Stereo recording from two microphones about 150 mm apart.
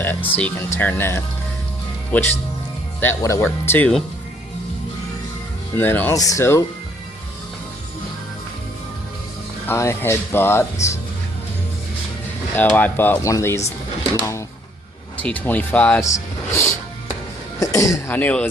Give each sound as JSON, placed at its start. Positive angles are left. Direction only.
{"t": 0.0, "sound": "speech", "side_deg": 15}
{"t": 5.7, "sound": "speech", "side_deg": 15}
{"t": 9.6, "sound": "speech", "side_deg": 15}
{"t": 12.5, "sound": "speech", "side_deg": 10}
{"t": 17.6, "sound": "speech", "side_deg": 20}